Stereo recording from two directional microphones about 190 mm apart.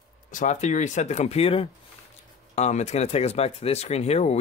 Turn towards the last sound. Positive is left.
turn(degrees=35)  # may be behind; listen again after turning